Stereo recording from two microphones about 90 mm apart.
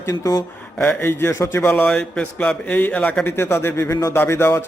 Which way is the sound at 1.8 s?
10° left (ahead or behind).